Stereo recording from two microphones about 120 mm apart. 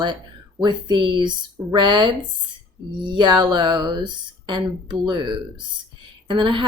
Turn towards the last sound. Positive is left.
turn(degrees=-45)  # may be behind; listen again after turning